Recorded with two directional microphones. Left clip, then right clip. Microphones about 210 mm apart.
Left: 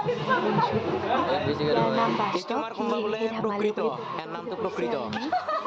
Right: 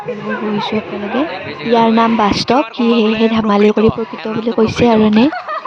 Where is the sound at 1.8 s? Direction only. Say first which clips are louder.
Right 16 dB; 50° right (ahead or behind).